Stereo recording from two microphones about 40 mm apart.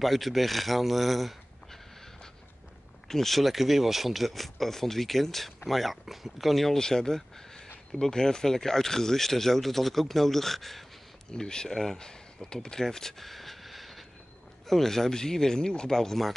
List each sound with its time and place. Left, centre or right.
0.0 s speech: centre
3.1 s speech: centre
6.8 s speech: centre
11.3 s speech: centre
12.6 s a sound: centre
14.7 s speech: centre